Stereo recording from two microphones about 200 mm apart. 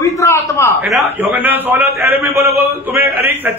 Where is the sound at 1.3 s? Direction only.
10° right (ahead or behind).